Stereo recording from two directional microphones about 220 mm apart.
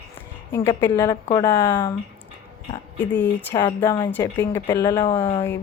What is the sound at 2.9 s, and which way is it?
A woman's voice, 5° left (ahead or behind).